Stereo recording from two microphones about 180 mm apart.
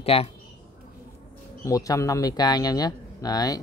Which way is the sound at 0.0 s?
35° left (ahead or behind).